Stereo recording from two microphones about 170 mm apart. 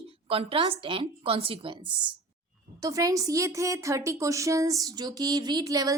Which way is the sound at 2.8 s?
20° right (ahead or behind).